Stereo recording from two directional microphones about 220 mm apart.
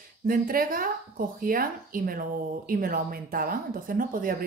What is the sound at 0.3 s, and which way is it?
Speech, 40° right (ahead or behind).